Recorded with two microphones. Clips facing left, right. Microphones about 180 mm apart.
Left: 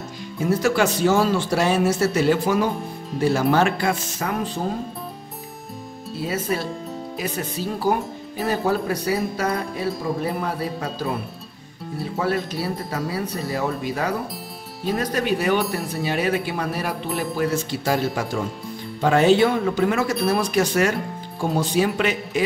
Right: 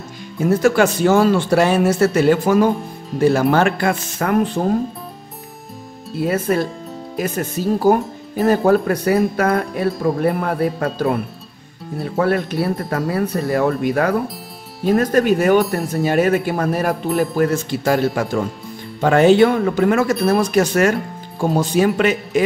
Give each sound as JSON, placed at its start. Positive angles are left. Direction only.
{"t": 0.5, "sound": "a man's voice", "side_deg": -50}
{"t": 6.1, "sound": "a man's voice", "side_deg": -55}